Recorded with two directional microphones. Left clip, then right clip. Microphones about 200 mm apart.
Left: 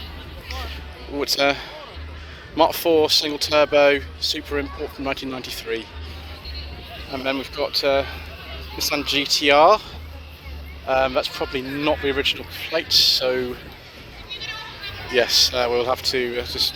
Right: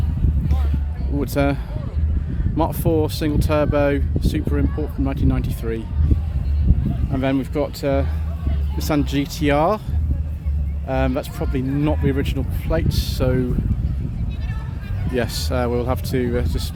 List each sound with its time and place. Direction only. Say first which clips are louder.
1.2 s speech: left 2 dB; 5° right (ahead or behind)
2.6 s speech: left 4 dB; 5° right (ahead or behind)
7.1 s speech: right 3 dB; 20° right (ahead or behind)
10.8 s speech: left 3 dB; 5° right (ahead or behind)
15.1 s speech: left 6 dB; 5° right (ahead or behind)